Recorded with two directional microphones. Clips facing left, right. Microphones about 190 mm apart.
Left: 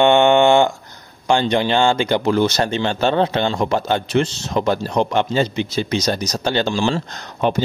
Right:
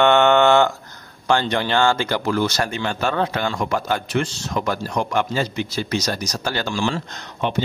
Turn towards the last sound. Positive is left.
turn(degrees=40)  # may be behind; listen again after turning